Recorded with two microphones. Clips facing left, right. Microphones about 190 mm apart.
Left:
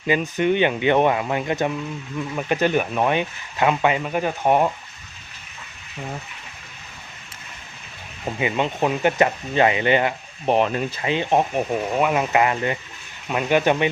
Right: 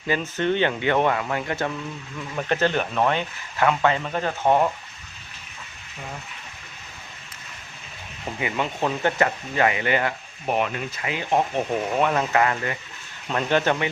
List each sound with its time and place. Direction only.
0.1 s speech: 15° left (ahead or behind)
8.4 s speech: 20° left (ahead or behind)
11.7 s speech: 5° left (ahead or behind)